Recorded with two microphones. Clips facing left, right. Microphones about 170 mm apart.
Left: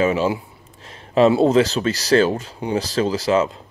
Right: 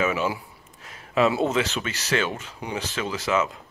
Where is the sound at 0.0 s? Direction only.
30° left (ahead or behind).